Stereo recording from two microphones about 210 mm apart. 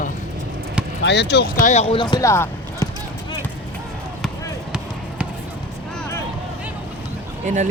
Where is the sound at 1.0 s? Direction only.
55° left (ahead or behind); by 2.9 s 15° left (ahead or behind).